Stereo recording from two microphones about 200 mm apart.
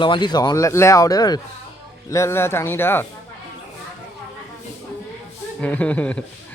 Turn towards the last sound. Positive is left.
turn(degrees=5)  # may be behind; listen again after turning